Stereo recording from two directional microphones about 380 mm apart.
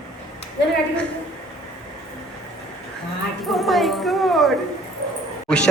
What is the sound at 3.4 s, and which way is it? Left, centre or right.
A woman's voice, centre.